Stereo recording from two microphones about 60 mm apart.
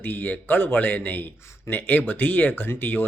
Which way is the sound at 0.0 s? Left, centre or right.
Left.